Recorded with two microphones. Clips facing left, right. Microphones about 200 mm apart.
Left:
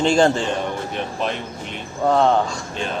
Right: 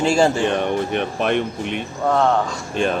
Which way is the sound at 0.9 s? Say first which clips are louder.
Right 5 dB; 65° right (ahead or behind).